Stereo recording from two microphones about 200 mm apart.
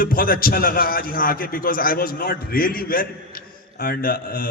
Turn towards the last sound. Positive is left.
turn(degrees=45)  # may be behind; listen again after turning